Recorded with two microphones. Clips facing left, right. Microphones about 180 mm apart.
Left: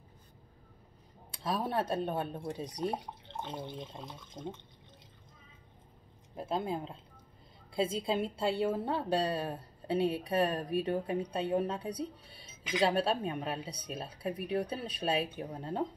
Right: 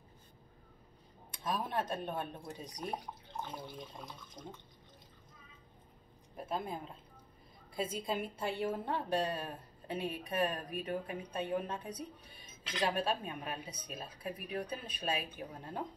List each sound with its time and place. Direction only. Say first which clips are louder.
1.5 s a woman's voice: left 4 dB; 30° left (ahead or behind)
6.3 s a woman's voice: left 5 dB; 30° left (ahead or behind)